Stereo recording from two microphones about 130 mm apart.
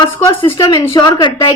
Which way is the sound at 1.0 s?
30° left (ahead or behind).